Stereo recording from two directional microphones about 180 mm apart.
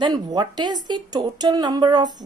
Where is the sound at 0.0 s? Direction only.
25° right (ahead or behind).